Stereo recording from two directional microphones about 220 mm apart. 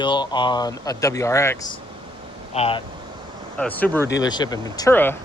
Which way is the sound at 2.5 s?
25° left (ahead or behind).